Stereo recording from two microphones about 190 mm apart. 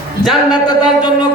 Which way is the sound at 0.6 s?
20° left (ahead or behind).